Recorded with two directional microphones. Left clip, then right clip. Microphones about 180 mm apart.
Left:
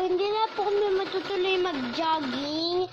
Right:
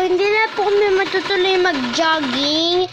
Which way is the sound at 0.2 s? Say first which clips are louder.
Right 10 dB; 30° right (ahead or behind).